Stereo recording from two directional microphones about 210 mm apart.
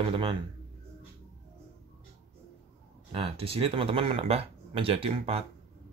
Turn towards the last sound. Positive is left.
turn(degrees=-30)  # may be behind; listen again after turning